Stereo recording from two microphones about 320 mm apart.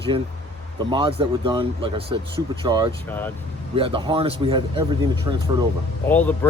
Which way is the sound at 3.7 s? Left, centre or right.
Centre.